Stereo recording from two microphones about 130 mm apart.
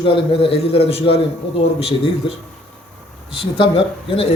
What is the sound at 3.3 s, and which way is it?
A man's voice, 40° left (ahead or behind).